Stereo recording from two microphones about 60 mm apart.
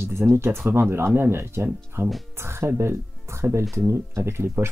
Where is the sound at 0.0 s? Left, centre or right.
Right.